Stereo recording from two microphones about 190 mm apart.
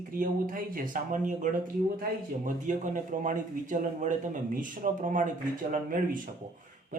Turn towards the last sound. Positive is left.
turn(degrees=-45)  # may be behind; listen again after turning